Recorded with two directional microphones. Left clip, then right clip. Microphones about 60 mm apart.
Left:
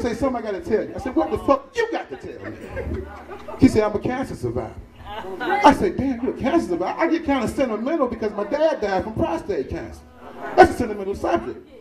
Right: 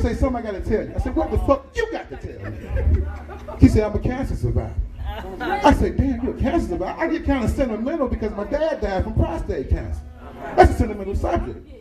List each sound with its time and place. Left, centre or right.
0.0 s speech: centre
3.5 s speech: left
5.1 s a woman's voice: right
5.6 s speech: left